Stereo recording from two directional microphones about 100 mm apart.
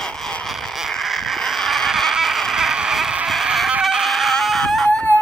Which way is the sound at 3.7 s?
5° right (ahead or behind).